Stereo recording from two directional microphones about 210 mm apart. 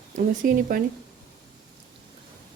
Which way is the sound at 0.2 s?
40° right (ahead or behind).